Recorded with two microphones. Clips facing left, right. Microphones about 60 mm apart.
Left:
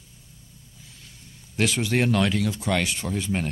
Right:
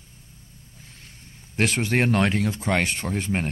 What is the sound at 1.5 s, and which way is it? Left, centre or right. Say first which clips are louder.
Speech: right 1 dB; right.